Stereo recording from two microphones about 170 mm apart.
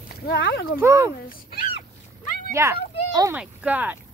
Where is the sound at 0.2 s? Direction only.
70° left (ahead or behind).